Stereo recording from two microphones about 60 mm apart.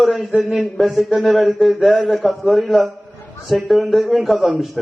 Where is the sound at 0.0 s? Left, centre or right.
Centre.